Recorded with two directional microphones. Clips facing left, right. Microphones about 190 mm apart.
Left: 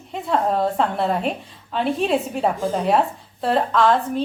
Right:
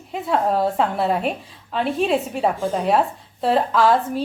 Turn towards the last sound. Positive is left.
turn(degrees=-5)  # may be behind; listen again after turning